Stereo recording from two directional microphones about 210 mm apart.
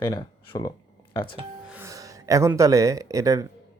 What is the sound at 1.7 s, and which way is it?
Speech, 15° right (ahead or behind).